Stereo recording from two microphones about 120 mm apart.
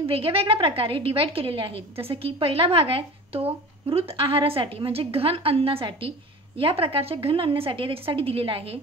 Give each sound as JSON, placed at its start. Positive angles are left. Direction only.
{"t": 0.0, "sound": "a woman's voice", "side_deg": -50}